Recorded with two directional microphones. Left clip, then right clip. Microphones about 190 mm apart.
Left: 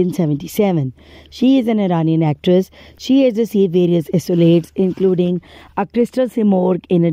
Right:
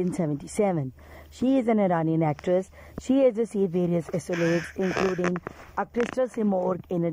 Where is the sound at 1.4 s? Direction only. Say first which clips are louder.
Left 8 dB; 15° left (ahead or behind); by 6.7 s 40° left (ahead or behind).